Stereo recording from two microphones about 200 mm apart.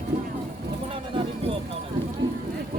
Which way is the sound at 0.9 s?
25° right (ahead or behind).